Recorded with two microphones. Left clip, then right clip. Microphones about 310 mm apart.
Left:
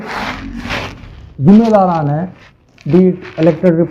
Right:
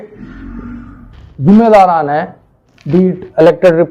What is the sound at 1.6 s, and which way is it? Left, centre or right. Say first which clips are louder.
Speech: right 5 dB; right.